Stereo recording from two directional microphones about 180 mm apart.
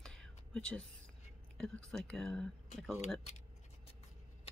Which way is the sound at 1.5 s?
5° left (ahead or behind).